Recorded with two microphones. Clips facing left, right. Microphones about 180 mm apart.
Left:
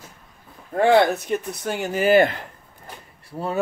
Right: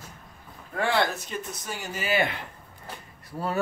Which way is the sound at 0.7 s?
45° left (ahead or behind).